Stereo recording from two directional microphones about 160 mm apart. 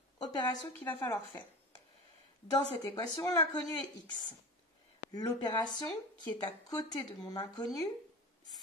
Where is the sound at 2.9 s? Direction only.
25° left (ahead or behind).